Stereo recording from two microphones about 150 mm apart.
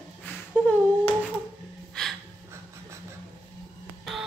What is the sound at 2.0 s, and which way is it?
Gasp, 5° left (ahead or behind).